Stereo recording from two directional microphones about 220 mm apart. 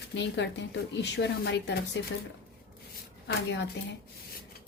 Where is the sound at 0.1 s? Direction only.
50° left (ahead or behind).